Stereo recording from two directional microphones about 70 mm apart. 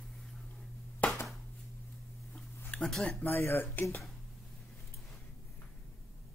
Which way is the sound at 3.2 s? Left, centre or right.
Left.